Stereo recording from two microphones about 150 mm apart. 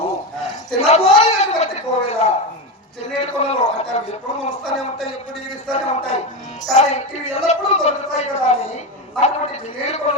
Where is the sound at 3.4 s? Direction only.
45° left (ahead or behind).